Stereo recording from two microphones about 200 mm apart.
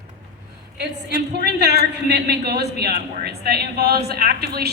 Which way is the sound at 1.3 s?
55° right (ahead or behind).